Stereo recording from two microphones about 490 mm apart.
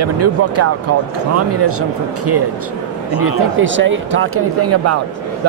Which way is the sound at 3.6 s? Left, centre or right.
Right.